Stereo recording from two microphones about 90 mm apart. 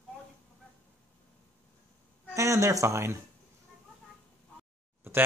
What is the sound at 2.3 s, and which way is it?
Speech, 35° right (ahead or behind).